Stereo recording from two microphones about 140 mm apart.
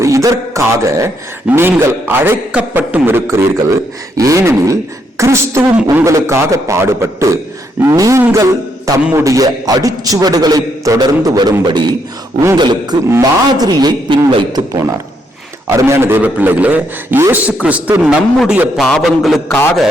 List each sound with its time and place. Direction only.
0.0 s a man's voice: 20° right (ahead or behind)
13.1 s a man's voice: 20° right (ahead or behind)
13.7 s a man's voice: 30° right (ahead or behind)
15.7 s a man's voice: 20° right (ahead or behind); by 19.5 s centre (ahead or behind)